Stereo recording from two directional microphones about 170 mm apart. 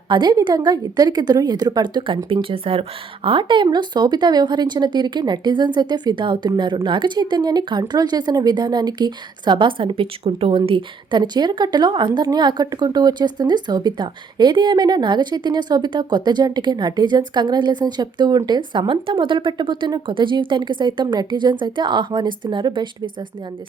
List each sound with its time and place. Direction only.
0.1 s speech: 25° right (ahead or behind)